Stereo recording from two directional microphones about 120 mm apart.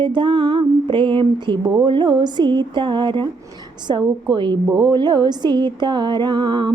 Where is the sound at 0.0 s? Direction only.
40° right (ahead or behind).